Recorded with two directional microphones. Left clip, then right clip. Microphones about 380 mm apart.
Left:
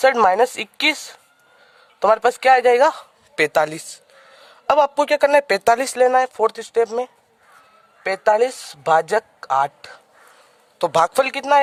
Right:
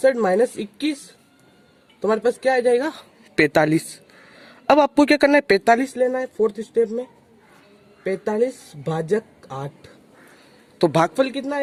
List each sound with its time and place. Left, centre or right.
0.0 s speech: left
2.0 s a man's voice: centre